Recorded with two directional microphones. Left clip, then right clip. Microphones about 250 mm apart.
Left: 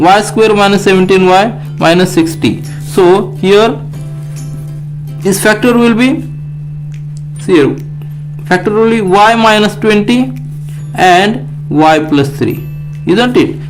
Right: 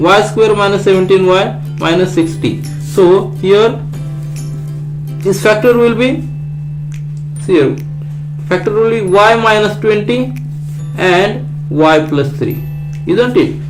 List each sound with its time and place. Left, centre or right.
0.0 s speech: left
5.2 s speech: left
7.5 s speech: left